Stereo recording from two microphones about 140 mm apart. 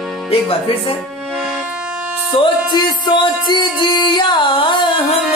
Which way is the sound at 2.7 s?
30° left (ahead or behind).